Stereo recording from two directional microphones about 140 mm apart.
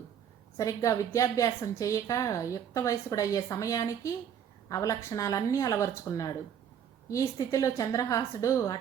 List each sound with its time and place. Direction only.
0.5 s a woman's voice: 25° left (ahead or behind)